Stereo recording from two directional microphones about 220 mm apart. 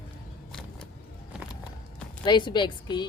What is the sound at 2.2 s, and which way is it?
Speech, 20° left (ahead or behind).